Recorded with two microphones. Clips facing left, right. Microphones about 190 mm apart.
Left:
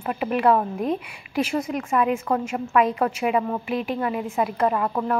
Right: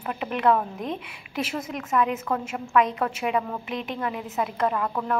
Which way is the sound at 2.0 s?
5° left (ahead or behind).